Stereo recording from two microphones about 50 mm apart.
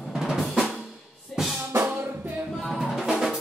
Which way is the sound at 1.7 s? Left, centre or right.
Right.